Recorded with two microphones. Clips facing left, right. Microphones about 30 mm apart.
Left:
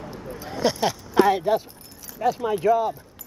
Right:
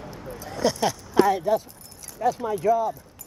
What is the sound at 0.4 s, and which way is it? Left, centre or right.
Speech, left.